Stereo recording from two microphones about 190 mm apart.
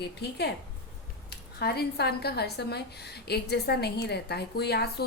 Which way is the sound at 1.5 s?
55° left (ahead or behind).